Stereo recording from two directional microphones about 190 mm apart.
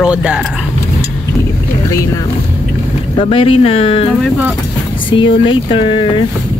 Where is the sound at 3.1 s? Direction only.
30° left (ahead or behind).